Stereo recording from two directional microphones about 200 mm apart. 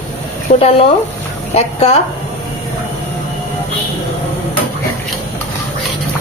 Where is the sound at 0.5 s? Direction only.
35° left (ahead or behind).